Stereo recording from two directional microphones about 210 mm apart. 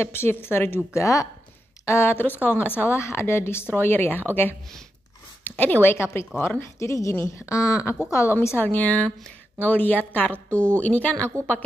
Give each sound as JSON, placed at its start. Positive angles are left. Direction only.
{"t": 0.0, "sound": "a woman's voice", "side_deg": 10}